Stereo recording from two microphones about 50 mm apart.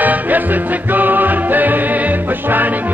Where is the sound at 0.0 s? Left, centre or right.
Right.